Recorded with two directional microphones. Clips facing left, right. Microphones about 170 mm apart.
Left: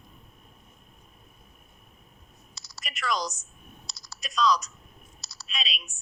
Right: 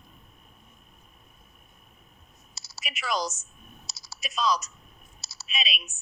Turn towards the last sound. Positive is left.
turn(degrees=-5)  # may be behind; listen again after turning